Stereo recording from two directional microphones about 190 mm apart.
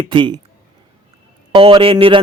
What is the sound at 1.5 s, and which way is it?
Speech, 30° right (ahead or behind).